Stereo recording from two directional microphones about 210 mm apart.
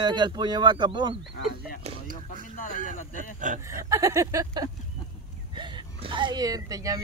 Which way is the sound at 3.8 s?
15° right (ahead or behind).